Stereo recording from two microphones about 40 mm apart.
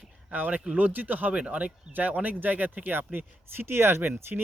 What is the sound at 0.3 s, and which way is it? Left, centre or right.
Speech, right.